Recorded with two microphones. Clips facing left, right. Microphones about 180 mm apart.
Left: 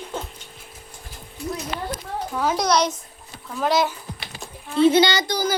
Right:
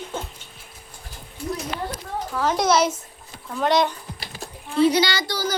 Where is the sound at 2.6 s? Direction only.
5° right (ahead or behind).